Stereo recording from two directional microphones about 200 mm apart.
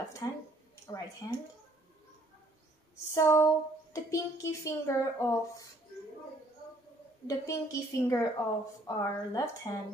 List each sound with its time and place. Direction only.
0.2 s a woman's voice: 15° left (ahead or behind)
3.1 s a woman's voice: 15° left (ahead or behind)
7.2 s a woman's voice: 15° left (ahead or behind)